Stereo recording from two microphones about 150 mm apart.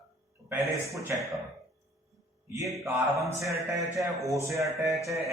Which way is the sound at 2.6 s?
Centre (ahead or behind).